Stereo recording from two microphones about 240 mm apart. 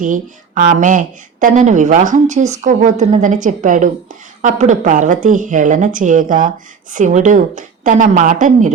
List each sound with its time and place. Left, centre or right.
0.0 s speech: right